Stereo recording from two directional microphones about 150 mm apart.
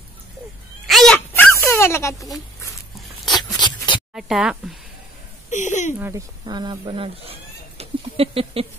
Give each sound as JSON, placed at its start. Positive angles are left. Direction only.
{"t": 0.8, "sound": "wail", "side_deg": 5}
{"t": 3.6, "sound": "a sound", "side_deg": 30}
{"t": 4.1, "sound": "speech", "side_deg": 0}
{"t": 5.5, "sound": "speech", "side_deg": 55}
{"t": 5.9, "sound": "speech", "side_deg": -15}
{"t": 6.4, "sound": "a sound", "side_deg": -30}